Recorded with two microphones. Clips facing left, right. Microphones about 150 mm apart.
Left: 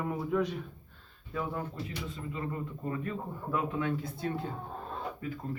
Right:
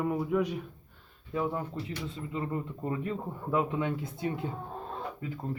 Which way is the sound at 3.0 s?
20° right (ahead or behind).